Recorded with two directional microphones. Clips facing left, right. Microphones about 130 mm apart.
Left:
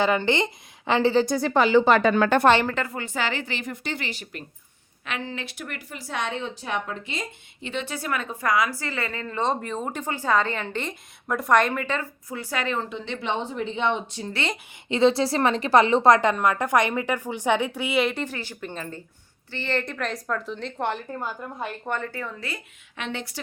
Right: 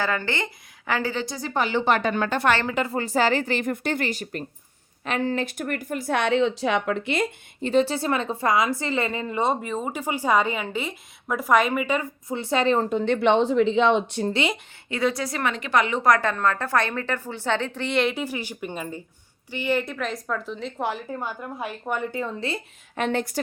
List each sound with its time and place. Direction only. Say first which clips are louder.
0.0 s a woman's voice: left 4 dB; 20° left (ahead or behind)
1.2 s a woman's voice: left 8 dB; 50° left (ahead or behind)
1.5 s speech: left 5 dB; 90° left
2.3 s a woman's voice: left 5 dB; 65° left (ahead or behind)
2.9 s a woman's voice: right 6 dB; 35° right (ahead or behind); by 7.3 s 65° right (ahead or behind)
7.6 s a woman's voice: right 10 dB; 40° right (ahead or behind); by 12.0 s 10° right (ahead or behind)
12.3 s speech: right 7 dB; 25° right (ahead or behind); by 14.2 s 90° right
14.4 s a woman's voice: even; 15° right (ahead or behind)
14.8 s a woman's voice: left 5 dB; 25° left (ahead or behind); by 22.6 s 25° right (ahead or behind)
23.0 s a woman's voice: right 8 dB; 45° right (ahead or behind)